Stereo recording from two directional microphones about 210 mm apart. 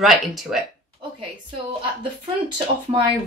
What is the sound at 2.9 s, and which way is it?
Speech, 25° right (ahead or behind).